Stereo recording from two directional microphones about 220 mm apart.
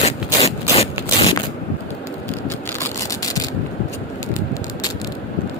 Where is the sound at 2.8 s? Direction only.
15° left (ahead or behind).